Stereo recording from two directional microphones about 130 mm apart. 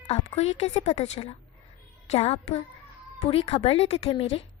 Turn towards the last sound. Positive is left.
turn(degrees=50)  # may be behind; listen again after turning